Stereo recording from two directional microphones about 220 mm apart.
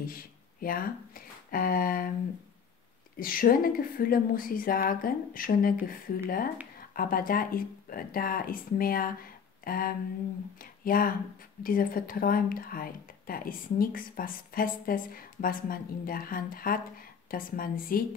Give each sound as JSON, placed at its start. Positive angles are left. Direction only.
{"t": 0.0, "sound": "speech", "side_deg": 40}
{"t": 3.2, "sound": "speech", "side_deg": 40}